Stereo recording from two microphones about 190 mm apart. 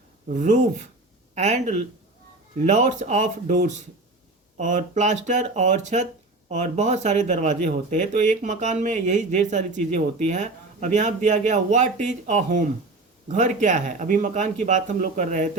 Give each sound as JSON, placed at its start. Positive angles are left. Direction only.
{"t": 0.3, "sound": "speech", "side_deg": -40}